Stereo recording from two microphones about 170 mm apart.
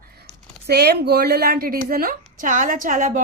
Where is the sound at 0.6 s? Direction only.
70° right (ahead or behind).